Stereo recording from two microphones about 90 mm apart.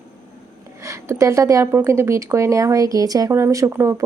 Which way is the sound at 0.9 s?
35° right (ahead or behind).